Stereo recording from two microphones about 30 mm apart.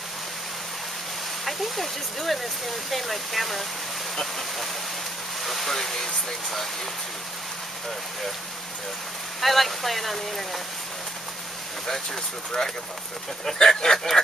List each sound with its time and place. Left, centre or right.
1.4 s speech: centre
5.4 s speech: centre
9.4 s speech: centre
13.6 s a sound: left
13.9 s speech: centre